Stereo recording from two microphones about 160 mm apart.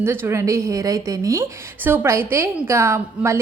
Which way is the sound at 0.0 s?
15° right (ahead or behind).